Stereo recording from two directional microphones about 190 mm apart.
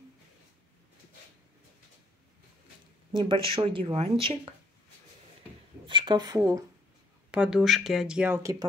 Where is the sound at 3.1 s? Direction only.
25° right (ahead or behind).